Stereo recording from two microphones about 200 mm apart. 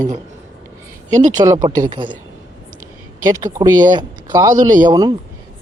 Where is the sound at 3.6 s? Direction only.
20° right (ahead or behind).